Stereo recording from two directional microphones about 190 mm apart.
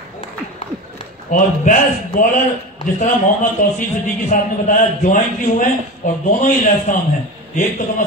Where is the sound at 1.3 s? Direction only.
45° left (ahead or behind).